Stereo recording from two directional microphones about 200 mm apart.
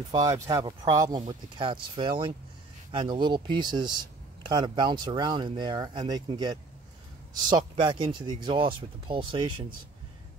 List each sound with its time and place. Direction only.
0.1 s speech: 15° right (ahead or behind)